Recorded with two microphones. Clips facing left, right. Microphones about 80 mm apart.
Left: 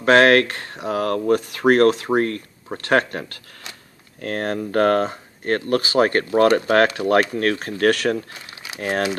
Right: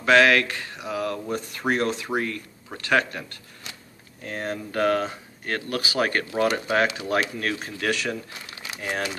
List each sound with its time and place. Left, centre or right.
0.0 s speech: left
2.0 s speech: left